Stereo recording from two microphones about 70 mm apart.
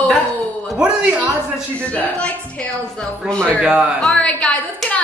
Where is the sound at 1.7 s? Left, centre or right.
Centre.